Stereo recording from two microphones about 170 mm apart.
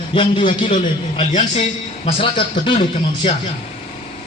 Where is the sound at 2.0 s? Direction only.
30° left (ahead or behind).